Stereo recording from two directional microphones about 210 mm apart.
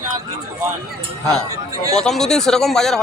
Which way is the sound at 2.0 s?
Centre (ahead or behind).